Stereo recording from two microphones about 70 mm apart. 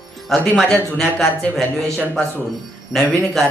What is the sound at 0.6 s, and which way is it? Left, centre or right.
A man's voice, centre.